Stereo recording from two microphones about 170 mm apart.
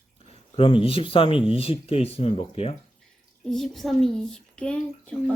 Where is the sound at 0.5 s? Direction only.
30° left (ahead or behind).